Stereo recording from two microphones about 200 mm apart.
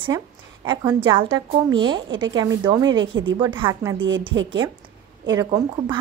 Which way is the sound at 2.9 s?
70° right (ahead or behind).